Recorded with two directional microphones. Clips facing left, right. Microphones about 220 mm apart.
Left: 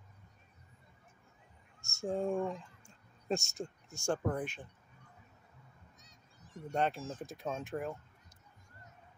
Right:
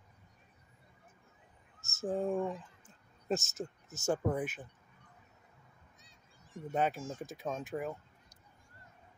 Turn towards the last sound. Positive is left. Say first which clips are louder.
# right 1 dB
turn(degrees=0)  # may be behind; listen again after turning